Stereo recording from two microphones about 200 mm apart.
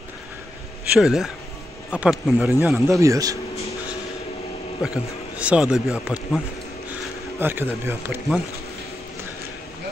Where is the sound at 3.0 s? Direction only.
15° right (ahead or behind).